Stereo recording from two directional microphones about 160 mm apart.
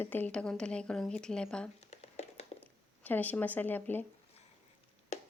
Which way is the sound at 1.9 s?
40° left (ahead or behind).